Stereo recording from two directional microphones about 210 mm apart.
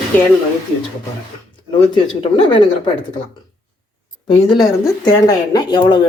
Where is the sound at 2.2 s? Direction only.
25° left (ahead or behind).